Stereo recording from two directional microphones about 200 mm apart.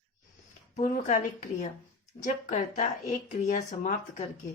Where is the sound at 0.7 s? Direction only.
40° left (ahead or behind).